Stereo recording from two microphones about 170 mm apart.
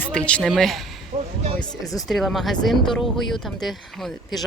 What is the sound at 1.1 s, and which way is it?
Music, 40° right (ahead or behind).